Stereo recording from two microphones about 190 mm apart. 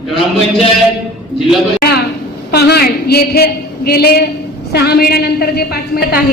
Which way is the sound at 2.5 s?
55° left (ahead or behind).